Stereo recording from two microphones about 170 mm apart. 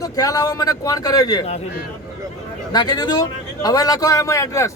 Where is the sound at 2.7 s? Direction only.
25° left (ahead or behind).